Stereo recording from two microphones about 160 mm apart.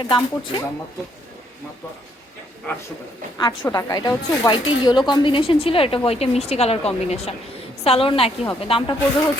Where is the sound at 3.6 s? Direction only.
25° left (ahead or behind).